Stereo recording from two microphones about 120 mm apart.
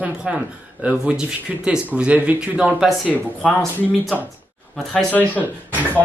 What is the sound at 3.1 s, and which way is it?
Speech, 15° left (ahead or behind).